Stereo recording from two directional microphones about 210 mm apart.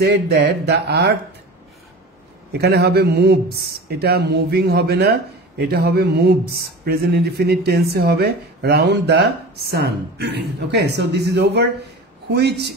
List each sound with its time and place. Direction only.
0.0 s speech: 50° right (ahead or behind)
2.5 s speech: 50° right (ahead or behind)